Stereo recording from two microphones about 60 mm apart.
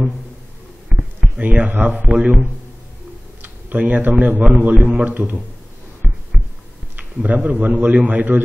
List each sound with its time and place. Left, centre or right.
0.8 s a sound: centre
1.5 s a man's voice: right
3.4 s a man's voice: right
7.0 s a man's voice: right